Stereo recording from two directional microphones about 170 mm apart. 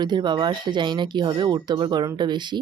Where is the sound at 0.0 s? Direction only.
25° right (ahead or behind).